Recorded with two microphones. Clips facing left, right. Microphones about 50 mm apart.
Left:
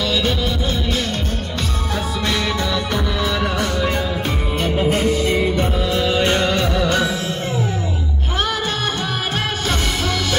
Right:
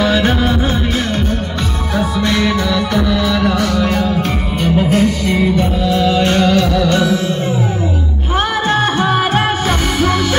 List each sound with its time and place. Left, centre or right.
0.0 s music: right
2.0 s music: centre